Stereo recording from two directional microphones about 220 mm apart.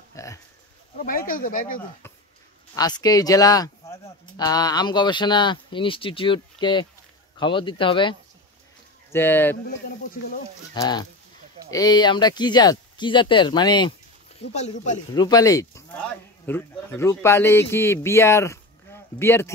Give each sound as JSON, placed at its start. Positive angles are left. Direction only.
{"t": 0.1, "sound": "a sound", "side_deg": 15}
{"t": 0.9, "sound": "speech", "side_deg": 40}
{"t": 2.7, "sound": "speech", "side_deg": 15}
{"t": 9.1, "sound": "speech", "side_deg": 10}
{"t": 9.7, "sound": "speech", "side_deg": 40}
{"t": 10.7, "sound": "speech", "side_deg": 20}
{"t": 14.5, "sound": "speech", "side_deg": 30}
{"t": 15.1, "sound": "speech", "side_deg": 15}